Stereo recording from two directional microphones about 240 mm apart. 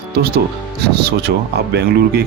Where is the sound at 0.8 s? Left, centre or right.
Right.